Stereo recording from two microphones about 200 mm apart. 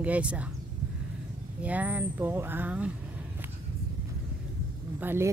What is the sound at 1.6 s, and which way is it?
Speech, 5° right (ahead or behind).